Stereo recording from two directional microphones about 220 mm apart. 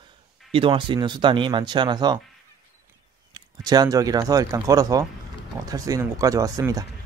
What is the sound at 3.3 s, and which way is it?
Speech, 15° right (ahead or behind).